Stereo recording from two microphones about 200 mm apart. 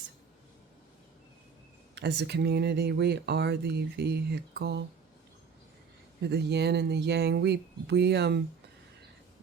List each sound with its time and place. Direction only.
2.0 s speech: 55° right (ahead or behind)
6.2 s speech: 55° right (ahead or behind)